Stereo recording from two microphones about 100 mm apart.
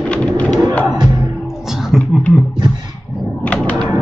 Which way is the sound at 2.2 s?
15° left (ahead or behind).